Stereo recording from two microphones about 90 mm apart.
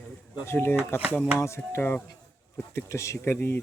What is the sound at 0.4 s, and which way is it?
Speech, 25° left (ahead or behind).